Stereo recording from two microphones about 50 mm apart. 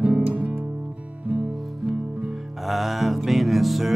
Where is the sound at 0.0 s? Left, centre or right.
Right.